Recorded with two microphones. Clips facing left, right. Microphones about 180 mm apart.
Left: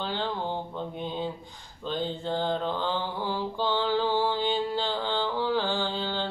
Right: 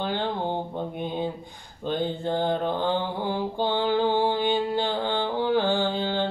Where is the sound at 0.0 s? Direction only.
55° right (ahead or behind).